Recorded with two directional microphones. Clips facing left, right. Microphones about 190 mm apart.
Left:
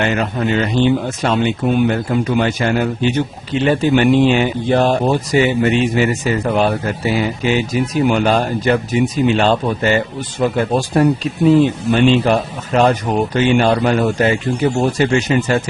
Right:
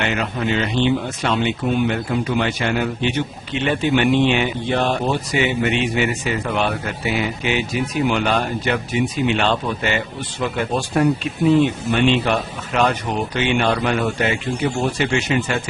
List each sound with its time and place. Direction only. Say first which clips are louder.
0.0 s speech: left 4 dB; 40° left (ahead or behind)